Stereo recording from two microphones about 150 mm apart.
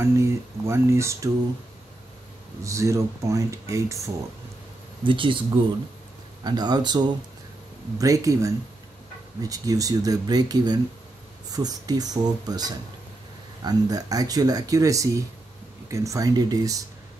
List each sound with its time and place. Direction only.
0.0 s speech: 20° right (ahead or behind)
2.6 s speech: 20° right (ahead or behind)
5.0 s speech: 35° right (ahead or behind)
6.4 s speech: 30° right (ahead or behind)